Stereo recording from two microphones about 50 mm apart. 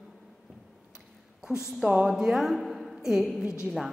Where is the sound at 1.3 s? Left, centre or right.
Centre.